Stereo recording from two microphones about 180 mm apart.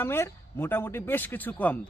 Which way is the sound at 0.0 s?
15° left (ahead or behind).